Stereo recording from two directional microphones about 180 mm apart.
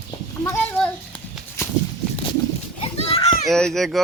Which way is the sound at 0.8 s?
5° left (ahead or behind).